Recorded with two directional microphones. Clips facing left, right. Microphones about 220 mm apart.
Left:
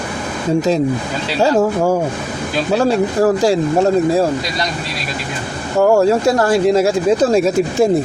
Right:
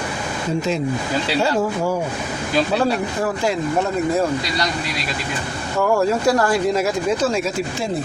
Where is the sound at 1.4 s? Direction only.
45° left (ahead or behind).